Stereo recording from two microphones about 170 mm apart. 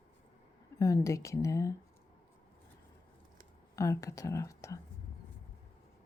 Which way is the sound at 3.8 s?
20° left (ahead or behind).